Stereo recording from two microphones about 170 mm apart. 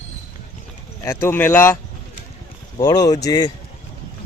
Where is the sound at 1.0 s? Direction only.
15° left (ahead or behind).